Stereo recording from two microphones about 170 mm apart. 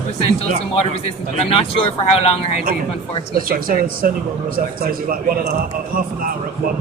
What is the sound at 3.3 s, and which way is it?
A man's voice, 60° right (ahead or behind).